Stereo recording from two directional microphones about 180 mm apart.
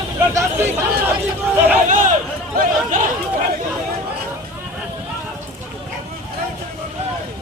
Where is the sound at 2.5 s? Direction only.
50° right (ahead or behind).